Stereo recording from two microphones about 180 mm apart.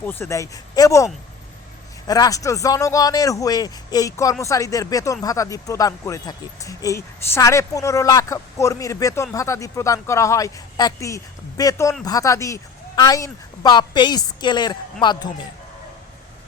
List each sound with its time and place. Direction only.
0.0 s a woman's voice: 10° left (ahead or behind)